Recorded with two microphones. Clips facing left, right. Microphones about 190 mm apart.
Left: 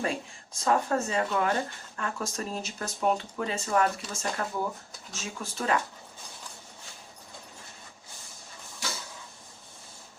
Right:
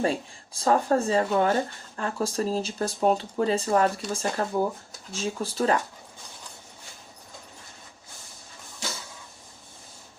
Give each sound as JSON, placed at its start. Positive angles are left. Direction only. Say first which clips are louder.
{"t": 0.0, "sound": "speech", "louder": "right 5 dB", "side_deg": -30}